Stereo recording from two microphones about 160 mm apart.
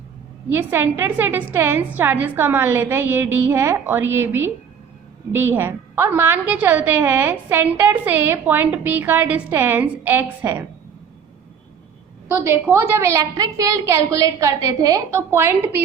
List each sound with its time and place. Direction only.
0.5 s a woman's voice: 15° right (ahead or behind)
12.6 s a woman's voice: 15° right (ahead or behind)